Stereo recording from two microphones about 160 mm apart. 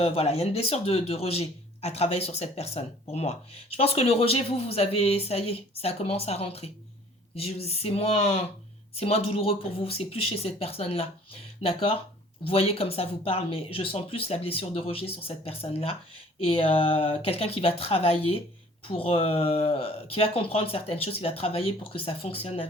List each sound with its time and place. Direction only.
0.0 s speech: 40° left (ahead or behind)